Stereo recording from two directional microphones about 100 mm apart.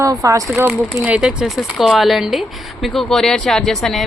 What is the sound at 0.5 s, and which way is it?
Speech, 15° right (ahead or behind).